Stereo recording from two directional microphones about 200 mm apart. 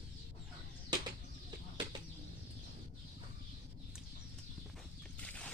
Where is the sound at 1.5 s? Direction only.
20° right (ahead or behind).